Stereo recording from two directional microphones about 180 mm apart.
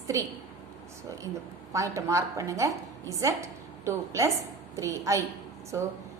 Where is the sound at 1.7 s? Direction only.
15° right (ahead or behind).